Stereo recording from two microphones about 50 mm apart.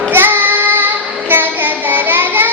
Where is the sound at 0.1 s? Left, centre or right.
Right.